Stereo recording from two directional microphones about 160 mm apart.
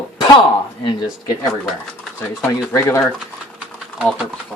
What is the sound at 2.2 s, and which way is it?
Speech, 15° left (ahead or behind).